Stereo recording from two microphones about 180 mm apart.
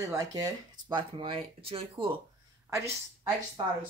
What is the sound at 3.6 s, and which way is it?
Speech, 25° right (ahead or behind).